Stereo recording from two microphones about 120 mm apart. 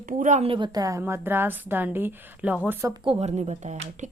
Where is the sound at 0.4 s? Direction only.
45° right (ahead or behind); by 2.6 s 15° right (ahead or behind).